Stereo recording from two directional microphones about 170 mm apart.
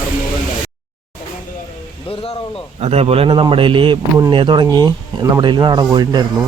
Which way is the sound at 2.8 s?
35° right (ahead or behind).